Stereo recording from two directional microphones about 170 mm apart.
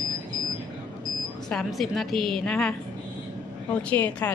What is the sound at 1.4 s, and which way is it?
A woman's voice, centre (ahead or behind).